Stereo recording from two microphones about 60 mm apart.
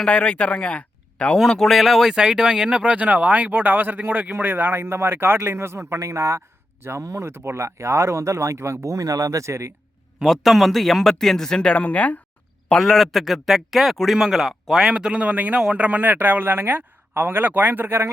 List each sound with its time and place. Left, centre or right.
0.0 s speech: centre
1.4 s a man's voice: centre; by 9.7 s right
10.2 s a man's voice: centre; by 12.1 s left
12.7 s a man's voice: centre
14.8 s speech: centre; by 18.1 s right